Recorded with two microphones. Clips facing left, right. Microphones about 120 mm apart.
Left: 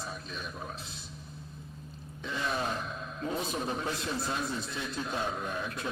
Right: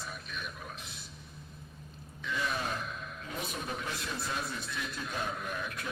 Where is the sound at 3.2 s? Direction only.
30° left (ahead or behind).